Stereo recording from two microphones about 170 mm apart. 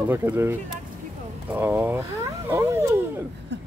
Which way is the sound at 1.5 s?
10° right (ahead or behind).